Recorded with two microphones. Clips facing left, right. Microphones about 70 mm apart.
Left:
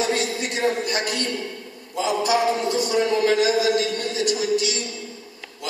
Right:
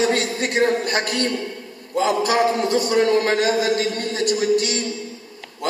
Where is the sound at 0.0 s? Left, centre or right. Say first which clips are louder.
Right 3 dB; right.